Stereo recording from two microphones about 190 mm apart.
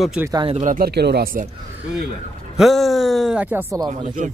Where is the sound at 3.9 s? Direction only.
40° right (ahead or behind).